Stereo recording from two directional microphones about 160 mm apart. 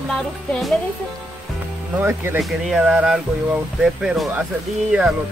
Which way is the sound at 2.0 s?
15° right (ahead or behind).